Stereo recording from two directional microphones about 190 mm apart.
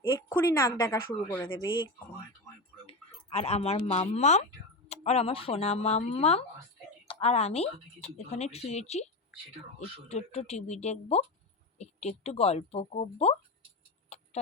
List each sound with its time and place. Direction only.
0.2 s a woman's voice: 15° left (ahead or behind)
2.8 s speech: 35° left (ahead or behind)
10.1 s speech: 35° left (ahead or behind)
14.1 s tick-tock: 35° left (ahead or behind)